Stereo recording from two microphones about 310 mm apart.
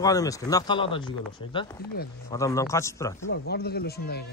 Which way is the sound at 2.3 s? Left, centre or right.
Centre.